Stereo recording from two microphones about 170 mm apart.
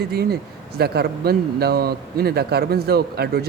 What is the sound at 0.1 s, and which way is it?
A man's voice, 70° right (ahead or behind).